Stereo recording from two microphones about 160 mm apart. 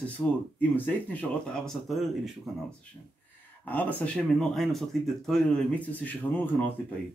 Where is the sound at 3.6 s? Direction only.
10° left (ahead or behind).